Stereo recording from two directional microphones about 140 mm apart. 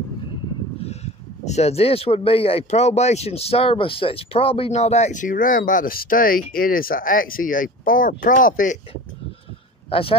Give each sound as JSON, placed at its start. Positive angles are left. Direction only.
{"t": 0.7, "sound": "speech", "side_deg": 50}
{"t": 9.8, "sound": "speech", "side_deg": 40}